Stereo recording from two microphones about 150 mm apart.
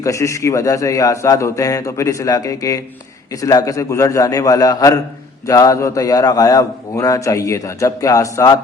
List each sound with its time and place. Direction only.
0.0 s a man's voice: 20° left (ahead or behind)